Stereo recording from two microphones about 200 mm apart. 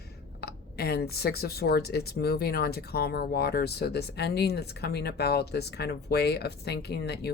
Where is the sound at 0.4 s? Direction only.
50° left (ahead or behind).